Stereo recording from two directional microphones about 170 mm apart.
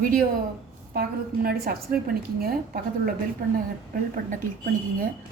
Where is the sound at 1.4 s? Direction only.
60° right (ahead or behind).